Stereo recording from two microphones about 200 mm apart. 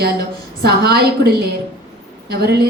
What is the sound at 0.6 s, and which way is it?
A woman's voice, 50° right (ahead or behind).